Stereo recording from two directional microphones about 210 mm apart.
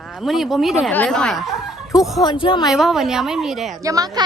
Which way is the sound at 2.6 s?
Centre (ahead or behind).